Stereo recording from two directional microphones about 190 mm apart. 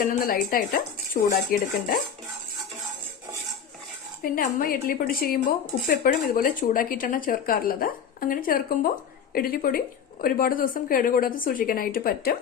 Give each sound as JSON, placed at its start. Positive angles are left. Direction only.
{"t": 0.1, "sound": "a woman's voice", "side_deg": 50}
{"t": 4.2, "sound": "a woman's voice", "side_deg": 45}